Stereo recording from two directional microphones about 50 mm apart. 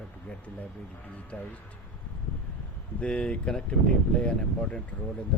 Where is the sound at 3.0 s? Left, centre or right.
Left.